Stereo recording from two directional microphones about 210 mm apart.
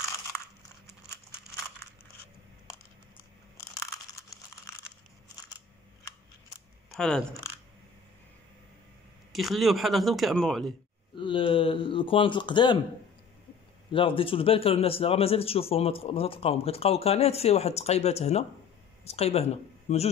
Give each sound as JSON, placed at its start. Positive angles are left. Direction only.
{"t": 0.3, "sound": "crushing", "side_deg": 5}
{"t": 3.7, "sound": "a sound", "side_deg": 15}
{"t": 6.9, "sound": "speech", "side_deg": 0}
{"t": 9.3, "sound": "speech", "side_deg": 0}
{"t": 11.1, "sound": "a man's voice", "side_deg": 25}
{"t": 13.9, "sound": "a man's voice", "side_deg": 25}